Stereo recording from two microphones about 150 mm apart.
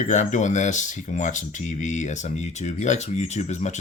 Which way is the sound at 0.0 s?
55° left (ahead or behind).